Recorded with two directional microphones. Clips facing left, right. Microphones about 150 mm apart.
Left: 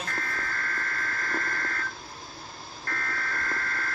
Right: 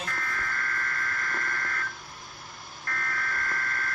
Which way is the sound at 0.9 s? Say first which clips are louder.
Left 1 dB; 30° left (ahead or behind).